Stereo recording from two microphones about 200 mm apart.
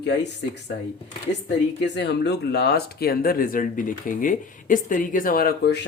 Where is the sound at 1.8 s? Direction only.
60° left (ahead or behind).